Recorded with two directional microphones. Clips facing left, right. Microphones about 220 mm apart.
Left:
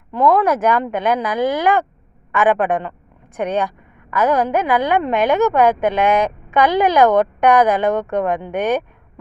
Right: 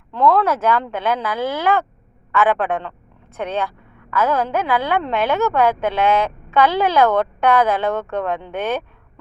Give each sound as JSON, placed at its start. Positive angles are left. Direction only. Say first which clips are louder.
{"t": 0.1, "sound": "a woman's voice", "louder": "left 2 dB", "side_deg": 15}